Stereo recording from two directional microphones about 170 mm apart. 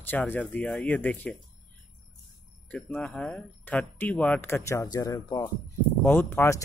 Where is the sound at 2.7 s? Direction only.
5° left (ahead or behind).